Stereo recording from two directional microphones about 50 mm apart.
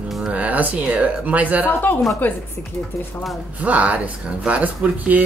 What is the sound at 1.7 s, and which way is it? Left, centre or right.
Speech, left.